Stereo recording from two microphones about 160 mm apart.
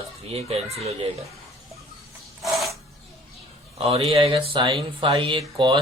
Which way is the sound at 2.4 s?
Centre (ahead or behind).